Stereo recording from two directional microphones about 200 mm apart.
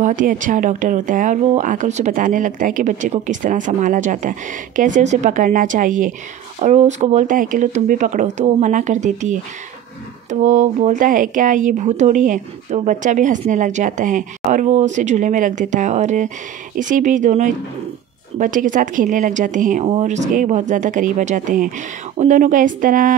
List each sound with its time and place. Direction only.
0.0 s speech: 40° right (ahead or behind)